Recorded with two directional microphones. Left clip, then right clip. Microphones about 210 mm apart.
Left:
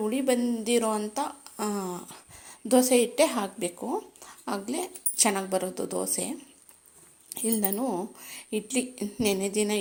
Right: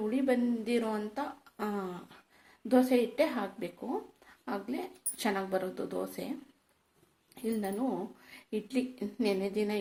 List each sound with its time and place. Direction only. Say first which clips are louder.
0.1 s speech: left 4 dB; 35° left (ahead or behind)
7.3 s speech: left 5 dB; 35° left (ahead or behind)